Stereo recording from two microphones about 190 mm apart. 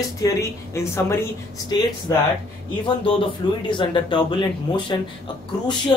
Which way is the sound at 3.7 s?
25° left (ahead or behind).